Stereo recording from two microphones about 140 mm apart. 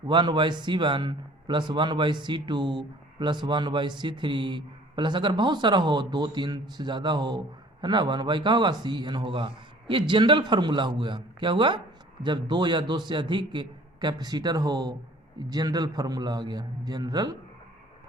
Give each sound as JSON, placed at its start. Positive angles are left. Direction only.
{"t": 0.1, "sound": "a man's voice", "side_deg": -35}